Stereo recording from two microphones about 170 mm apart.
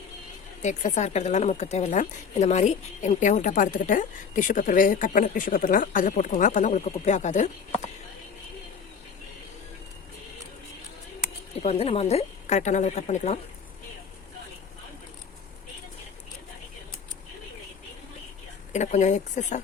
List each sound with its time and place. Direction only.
0.6 s speech: 45° left (ahead or behind)
11.6 s a woman's voice: 35° left (ahead or behind)
18.7 s speech: 45° left (ahead or behind)